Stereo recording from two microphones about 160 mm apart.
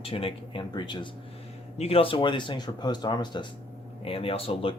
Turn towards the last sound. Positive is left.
turn(degrees=35)  # may be behind; listen again after turning